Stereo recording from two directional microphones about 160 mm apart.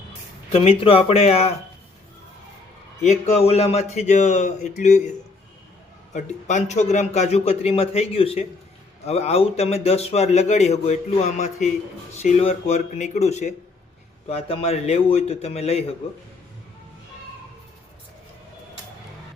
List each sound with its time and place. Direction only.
0.5 s a man's voice: 40° left (ahead or behind)
3.0 s a man's voice: 45° left (ahead or behind)
6.1 s a man's voice: 50° left (ahead or behind)